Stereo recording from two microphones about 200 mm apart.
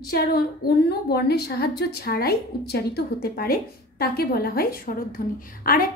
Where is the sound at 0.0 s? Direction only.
50° left (ahead or behind).